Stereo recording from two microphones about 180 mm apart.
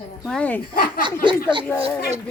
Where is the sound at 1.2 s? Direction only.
25° right (ahead or behind).